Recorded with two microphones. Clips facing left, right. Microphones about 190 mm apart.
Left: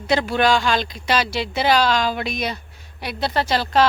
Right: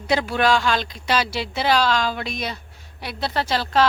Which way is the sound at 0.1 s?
5° right (ahead or behind).